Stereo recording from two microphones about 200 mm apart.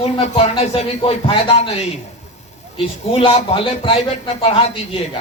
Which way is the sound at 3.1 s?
25° left (ahead or behind).